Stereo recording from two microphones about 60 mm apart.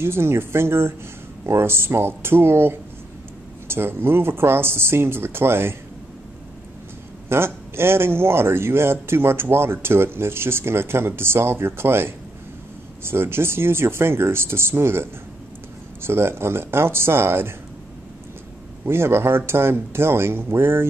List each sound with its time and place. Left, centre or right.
0.0 s speech: right
7.2 s speech: right
18.9 s speech: right